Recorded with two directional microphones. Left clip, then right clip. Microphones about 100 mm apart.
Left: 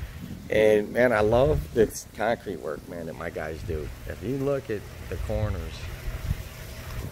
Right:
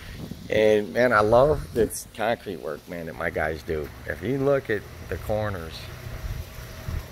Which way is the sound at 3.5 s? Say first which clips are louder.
Right 5 dB; 35° right (ahead or behind).